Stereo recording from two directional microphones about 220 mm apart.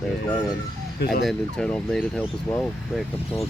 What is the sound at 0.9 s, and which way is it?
Speech, 45° left (ahead or behind).